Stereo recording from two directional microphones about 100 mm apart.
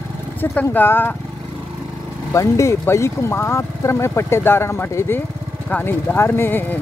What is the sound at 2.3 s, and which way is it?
Speech, 30° left (ahead or behind).